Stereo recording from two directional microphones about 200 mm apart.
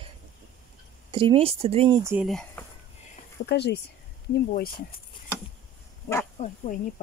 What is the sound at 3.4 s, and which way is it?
Speech, 55° left (ahead or behind).